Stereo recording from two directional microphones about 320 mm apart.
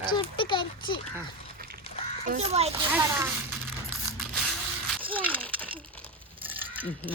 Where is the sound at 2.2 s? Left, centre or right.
Right.